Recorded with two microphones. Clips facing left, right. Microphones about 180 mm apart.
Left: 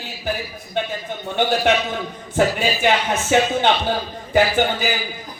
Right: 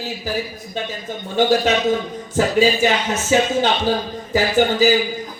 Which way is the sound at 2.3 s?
60° left (ahead or behind).